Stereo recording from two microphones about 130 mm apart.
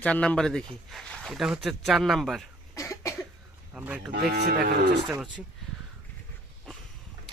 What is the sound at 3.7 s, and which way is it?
Speech, 10° right (ahead or behind).